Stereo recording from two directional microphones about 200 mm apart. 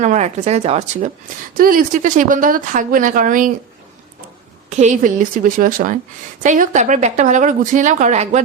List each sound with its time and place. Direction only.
0.0 s speech: 35° right (ahead or behind)
1.5 s speech: 45° right (ahead or behind)
4.7 s speech: 35° right (ahead or behind)